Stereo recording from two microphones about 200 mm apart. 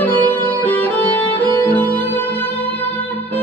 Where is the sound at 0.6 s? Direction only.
10° left (ahead or behind).